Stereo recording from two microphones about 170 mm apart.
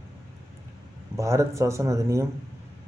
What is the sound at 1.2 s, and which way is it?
Speech, 15° right (ahead or behind).